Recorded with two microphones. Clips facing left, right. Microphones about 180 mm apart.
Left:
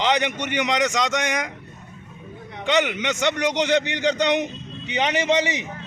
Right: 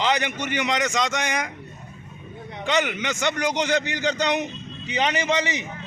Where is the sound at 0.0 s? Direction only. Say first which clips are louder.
Left 2 dB; 15° left (ahead or behind).